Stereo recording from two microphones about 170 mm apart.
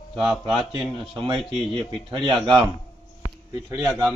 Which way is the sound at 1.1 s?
30° right (ahead or behind).